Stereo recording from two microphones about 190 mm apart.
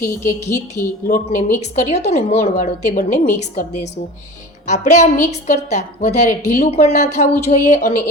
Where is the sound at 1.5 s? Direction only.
35° left (ahead or behind).